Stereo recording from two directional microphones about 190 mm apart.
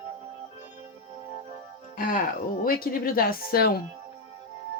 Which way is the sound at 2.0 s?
50° left (ahead or behind).